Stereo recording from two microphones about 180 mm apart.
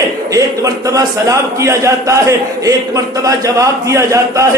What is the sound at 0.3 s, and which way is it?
A man's voice, 20° right (ahead or behind).